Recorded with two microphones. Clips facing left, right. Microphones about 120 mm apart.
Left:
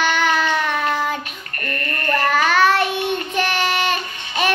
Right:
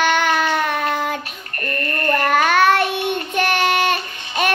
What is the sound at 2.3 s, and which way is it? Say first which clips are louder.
Child singing: right 1 dB; 50° right (ahead or behind).